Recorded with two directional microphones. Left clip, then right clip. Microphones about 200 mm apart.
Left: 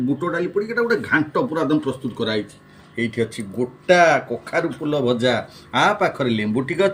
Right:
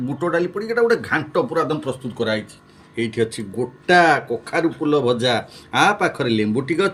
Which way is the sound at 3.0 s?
45° right (ahead or behind).